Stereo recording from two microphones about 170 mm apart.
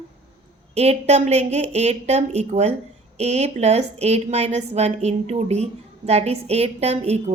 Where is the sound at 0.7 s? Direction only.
40° right (ahead or behind).